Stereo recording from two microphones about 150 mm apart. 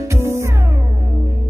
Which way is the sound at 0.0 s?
20° right (ahead or behind).